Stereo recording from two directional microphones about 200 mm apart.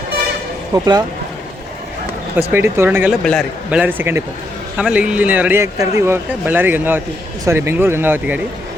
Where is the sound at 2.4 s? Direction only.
10° right (ahead or behind).